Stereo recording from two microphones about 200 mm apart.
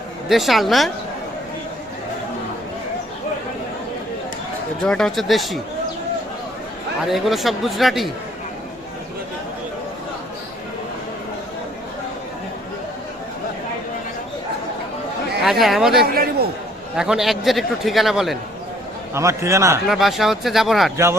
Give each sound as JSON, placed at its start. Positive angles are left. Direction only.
{"t": 0.3, "sound": "a man's voice", "side_deg": 0}
{"t": 4.8, "sound": "a man's voice", "side_deg": 5}
{"t": 7.1, "sound": "a man's voice", "side_deg": 0}
{"t": 15.4, "sound": "a man's voice", "side_deg": 0}
{"t": 16.1, "sound": "a sound", "side_deg": -50}
{"t": 17.0, "sound": "a man's voice", "side_deg": 0}
{"t": 19.1, "sound": "a man's voice", "side_deg": -15}
{"t": 19.9, "sound": "a man's voice", "side_deg": 0}